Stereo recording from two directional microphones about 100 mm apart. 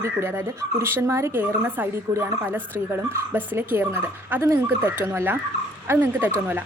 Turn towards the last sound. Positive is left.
turn(degrees=-20)  # may be behind; listen again after turning